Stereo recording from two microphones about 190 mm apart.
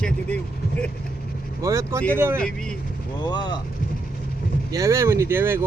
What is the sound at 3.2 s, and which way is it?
Speech, 20° left (ahead or behind).